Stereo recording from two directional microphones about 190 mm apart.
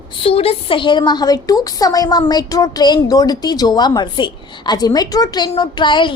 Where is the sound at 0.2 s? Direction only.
30° left (ahead or behind).